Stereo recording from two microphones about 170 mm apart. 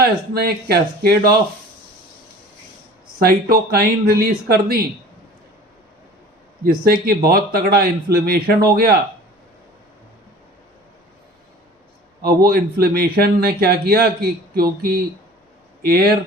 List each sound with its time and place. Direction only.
0.0 s speech: 65° right (ahead or behind)
3.2 s speech: 65° right (ahead or behind)
7.0 s speech: 65° right (ahead or behind)
12.2 s speech: 65° right (ahead or behind)